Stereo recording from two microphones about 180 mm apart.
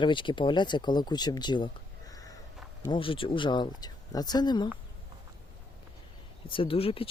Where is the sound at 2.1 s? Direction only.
20° left (ahead or behind).